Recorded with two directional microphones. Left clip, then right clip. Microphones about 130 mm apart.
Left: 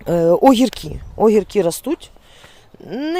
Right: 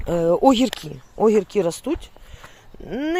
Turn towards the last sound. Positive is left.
turn(degrees=25)  # may be behind; listen again after turning